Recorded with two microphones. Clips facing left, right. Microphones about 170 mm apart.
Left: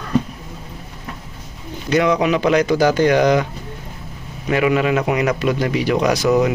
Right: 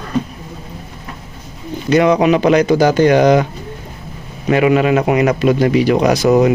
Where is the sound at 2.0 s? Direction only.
30° right (ahead or behind).